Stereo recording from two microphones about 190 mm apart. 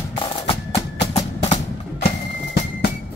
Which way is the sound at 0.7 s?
35° left (ahead or behind).